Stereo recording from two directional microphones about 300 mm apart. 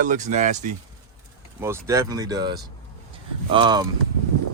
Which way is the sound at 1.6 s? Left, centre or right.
Centre.